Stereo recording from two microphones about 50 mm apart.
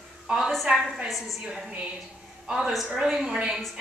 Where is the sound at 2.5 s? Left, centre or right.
Centre.